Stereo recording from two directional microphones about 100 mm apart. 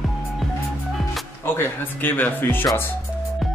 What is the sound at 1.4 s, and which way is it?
Speech, 25° left (ahead or behind).